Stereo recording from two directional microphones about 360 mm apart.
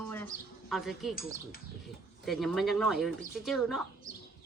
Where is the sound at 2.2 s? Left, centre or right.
Centre.